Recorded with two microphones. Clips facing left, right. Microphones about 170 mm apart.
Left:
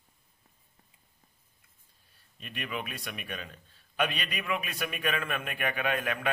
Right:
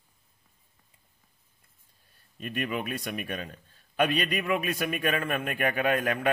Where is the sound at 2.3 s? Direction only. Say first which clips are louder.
Right 6 dB; 45° right (ahead or behind).